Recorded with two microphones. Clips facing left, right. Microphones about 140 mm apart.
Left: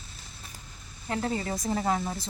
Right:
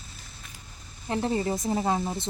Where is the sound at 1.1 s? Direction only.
20° right (ahead or behind).